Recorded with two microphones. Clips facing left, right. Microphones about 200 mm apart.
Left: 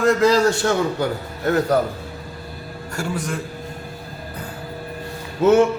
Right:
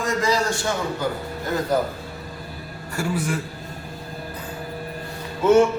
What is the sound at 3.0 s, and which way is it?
Speech, 5° right (ahead or behind).